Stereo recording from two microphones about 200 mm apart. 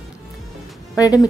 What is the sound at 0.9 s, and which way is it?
Speech, 20° left (ahead or behind).